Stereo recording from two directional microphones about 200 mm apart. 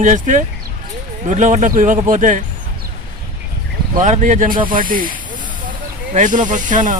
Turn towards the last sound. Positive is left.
turn(degrees=-40)  # may be behind; listen again after turning